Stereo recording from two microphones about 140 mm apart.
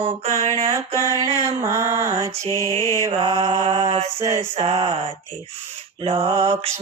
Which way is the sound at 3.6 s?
45° right (ahead or behind).